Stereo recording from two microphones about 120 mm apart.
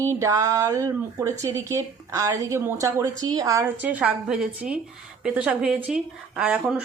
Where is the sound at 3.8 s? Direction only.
10° right (ahead or behind).